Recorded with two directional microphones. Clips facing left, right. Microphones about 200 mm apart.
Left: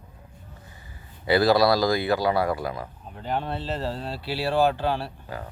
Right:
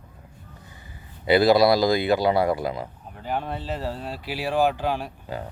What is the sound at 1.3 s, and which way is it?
Speech, 20° right (ahead or behind).